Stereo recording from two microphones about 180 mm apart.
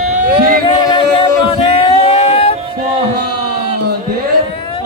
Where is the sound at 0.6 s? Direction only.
30° left (ahead or behind).